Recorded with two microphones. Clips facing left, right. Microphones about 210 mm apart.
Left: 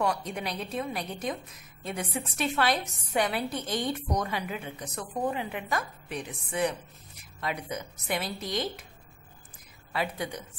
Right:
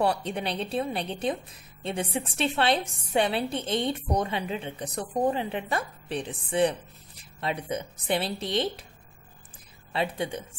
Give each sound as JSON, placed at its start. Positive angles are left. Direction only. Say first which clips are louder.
{"t": 0.0, "sound": "a woman's voice", "louder": "right 3 dB", "side_deg": -30}
{"t": 9.9, "sound": "a woman's voice", "louder": "right 3 dB", "side_deg": -25}